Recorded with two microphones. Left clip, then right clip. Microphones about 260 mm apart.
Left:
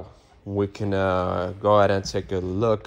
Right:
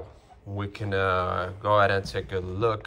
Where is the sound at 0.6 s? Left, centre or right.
Left.